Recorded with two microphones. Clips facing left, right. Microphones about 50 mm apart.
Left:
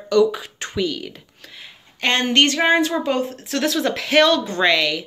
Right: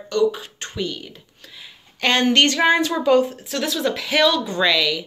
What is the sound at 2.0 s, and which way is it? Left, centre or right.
Speech, left.